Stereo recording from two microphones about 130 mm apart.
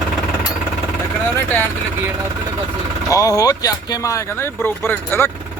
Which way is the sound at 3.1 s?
25° left (ahead or behind).